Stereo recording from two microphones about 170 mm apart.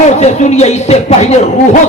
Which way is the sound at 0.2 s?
40° left (ahead or behind).